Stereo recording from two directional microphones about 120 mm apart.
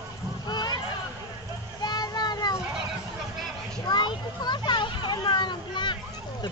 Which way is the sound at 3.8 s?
35° left (ahead or behind).